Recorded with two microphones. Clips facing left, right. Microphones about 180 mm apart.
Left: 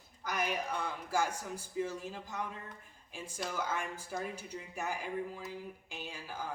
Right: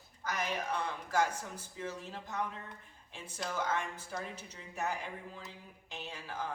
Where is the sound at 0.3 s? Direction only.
10° left (ahead or behind).